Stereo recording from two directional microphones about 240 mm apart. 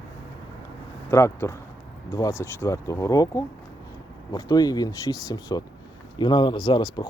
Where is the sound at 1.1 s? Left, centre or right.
Centre.